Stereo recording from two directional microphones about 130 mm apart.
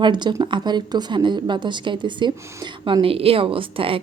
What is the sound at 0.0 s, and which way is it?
A woman's voice, 35° right (ahead or behind).